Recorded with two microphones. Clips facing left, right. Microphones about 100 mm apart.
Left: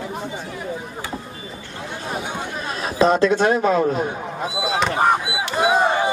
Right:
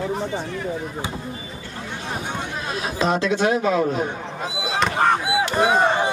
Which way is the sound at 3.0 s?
45° left (ahead or behind).